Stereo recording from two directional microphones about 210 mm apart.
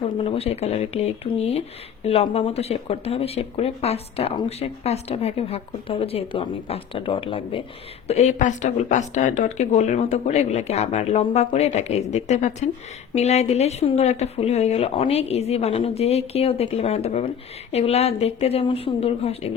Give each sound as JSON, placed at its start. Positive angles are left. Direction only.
{"t": 0.2, "sound": "speech", "side_deg": 30}